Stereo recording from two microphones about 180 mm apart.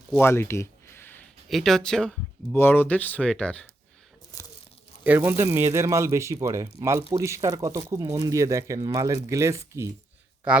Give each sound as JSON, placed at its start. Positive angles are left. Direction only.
{"t": 0.2, "sound": "a sound", "side_deg": 15}
{"t": 1.5, "sound": "speech", "side_deg": 0}
{"t": 5.0, "sound": "speech", "side_deg": -10}